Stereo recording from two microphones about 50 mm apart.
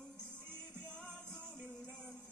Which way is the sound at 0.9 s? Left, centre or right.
Centre.